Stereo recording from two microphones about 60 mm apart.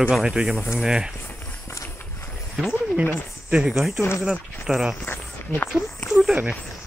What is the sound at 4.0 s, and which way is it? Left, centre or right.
Speech, left.